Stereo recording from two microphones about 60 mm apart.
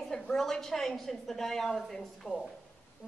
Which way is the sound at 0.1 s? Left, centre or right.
Centre.